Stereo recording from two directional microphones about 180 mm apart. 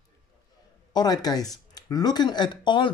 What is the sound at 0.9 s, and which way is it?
Speech, 20° left (ahead or behind).